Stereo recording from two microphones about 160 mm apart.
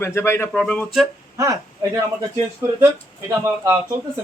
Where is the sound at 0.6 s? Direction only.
5° left (ahead or behind).